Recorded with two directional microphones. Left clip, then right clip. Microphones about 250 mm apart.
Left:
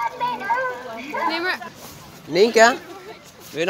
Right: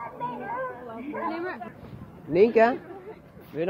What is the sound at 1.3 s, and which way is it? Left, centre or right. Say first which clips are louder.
Speech: left 9 dB; left.